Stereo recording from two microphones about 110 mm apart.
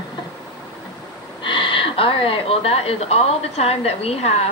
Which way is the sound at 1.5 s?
50° left (ahead or behind).